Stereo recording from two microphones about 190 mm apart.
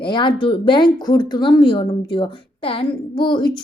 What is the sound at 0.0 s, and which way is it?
Speech, 25° left (ahead or behind).